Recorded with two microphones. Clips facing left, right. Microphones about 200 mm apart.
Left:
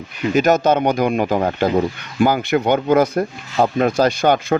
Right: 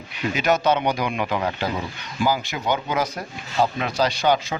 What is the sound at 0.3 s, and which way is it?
Speech, 45° left (ahead or behind).